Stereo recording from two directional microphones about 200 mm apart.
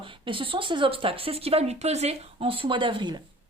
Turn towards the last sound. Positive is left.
turn(degrees=-25)  # may be behind; listen again after turning